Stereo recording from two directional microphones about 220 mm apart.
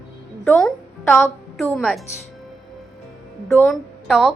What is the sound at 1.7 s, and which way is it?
Speech, centre (ahead or behind).